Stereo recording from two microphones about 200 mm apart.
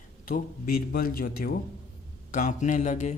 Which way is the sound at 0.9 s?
45° left (ahead or behind).